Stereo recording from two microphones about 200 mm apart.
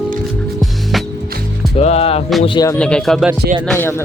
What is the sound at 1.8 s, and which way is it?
Music, 30° left (ahead or behind).